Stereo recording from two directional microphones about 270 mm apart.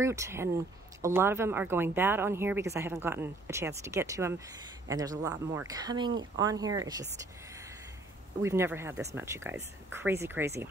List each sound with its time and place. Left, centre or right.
0.0 s speech: centre
8.4 s speech: centre